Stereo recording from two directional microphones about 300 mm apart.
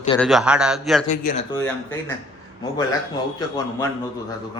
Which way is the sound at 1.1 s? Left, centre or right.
Left.